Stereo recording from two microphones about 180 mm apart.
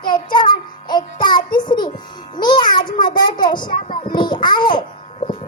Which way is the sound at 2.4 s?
25° left (ahead or behind).